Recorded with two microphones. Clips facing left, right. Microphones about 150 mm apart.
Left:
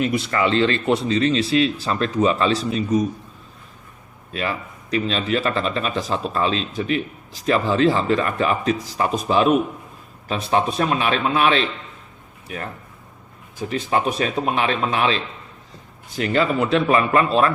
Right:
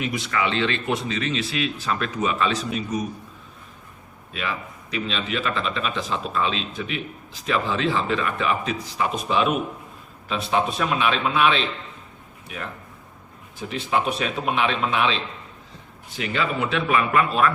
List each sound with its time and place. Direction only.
0.0 s speech: 40° left (ahead or behind)
4.4 s speech: 40° left (ahead or behind)
13.7 s speech: 40° left (ahead or behind)